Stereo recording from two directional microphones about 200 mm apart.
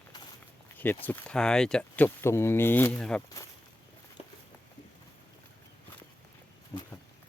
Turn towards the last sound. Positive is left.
turn(degrees=20)  # may be behind; listen again after turning